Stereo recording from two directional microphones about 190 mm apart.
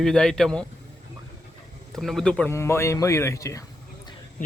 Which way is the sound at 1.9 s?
Centre (ahead or behind).